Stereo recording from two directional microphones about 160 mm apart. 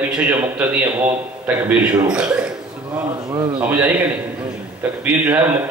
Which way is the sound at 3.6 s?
10° right (ahead or behind).